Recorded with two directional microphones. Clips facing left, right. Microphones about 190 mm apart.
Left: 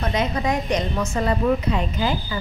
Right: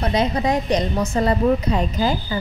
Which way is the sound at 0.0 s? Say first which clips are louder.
Right 3 dB; 35° right (ahead or behind).